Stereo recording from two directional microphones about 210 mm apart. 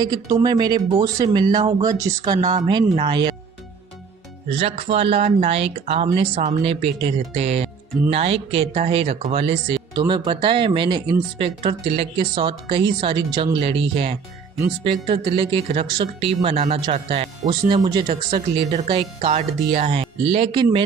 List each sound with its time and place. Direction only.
0.0 s speech: 20° right (ahead or behind)
4.5 s speech: 30° right (ahead or behind)